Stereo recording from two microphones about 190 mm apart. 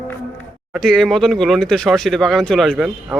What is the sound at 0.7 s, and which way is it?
A man's voice, centre (ahead or behind).